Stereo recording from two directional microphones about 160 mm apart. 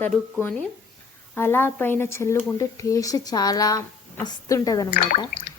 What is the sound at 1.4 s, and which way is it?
A woman's voice, 15° left (ahead or behind).